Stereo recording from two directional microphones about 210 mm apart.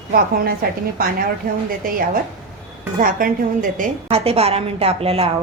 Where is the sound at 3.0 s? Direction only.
40° right (ahead or behind).